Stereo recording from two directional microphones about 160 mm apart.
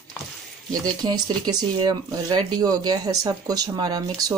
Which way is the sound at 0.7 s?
25° right (ahead or behind).